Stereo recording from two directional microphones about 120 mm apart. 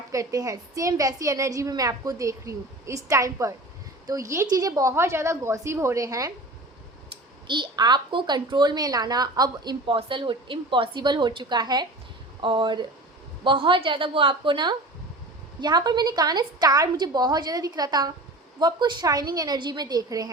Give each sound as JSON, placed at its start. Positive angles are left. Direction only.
{"t": 0.1, "sound": "a woman's voice", "side_deg": -30}
{"t": 7.4, "sound": "a woman's voice", "side_deg": -40}